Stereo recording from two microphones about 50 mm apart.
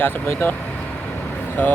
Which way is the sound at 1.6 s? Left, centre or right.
Left.